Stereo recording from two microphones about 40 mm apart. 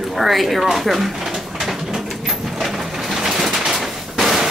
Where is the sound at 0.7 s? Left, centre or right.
Centre.